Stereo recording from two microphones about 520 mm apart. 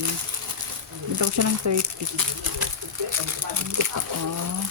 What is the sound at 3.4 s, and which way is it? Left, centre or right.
Speech, right.